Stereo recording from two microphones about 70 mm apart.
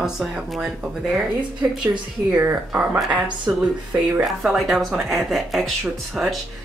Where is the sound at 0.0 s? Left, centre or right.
Centre.